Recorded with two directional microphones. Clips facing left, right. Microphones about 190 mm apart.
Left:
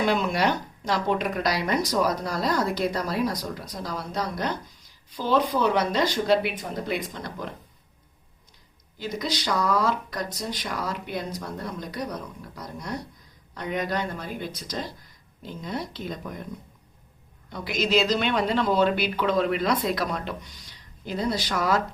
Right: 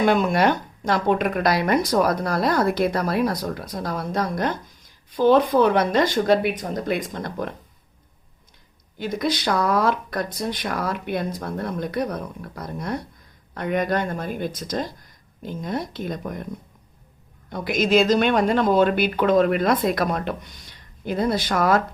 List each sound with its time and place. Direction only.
0.0 s speech: 50° right (ahead or behind)
9.0 s speech: 55° right (ahead or behind)
17.5 s speech: 50° right (ahead or behind)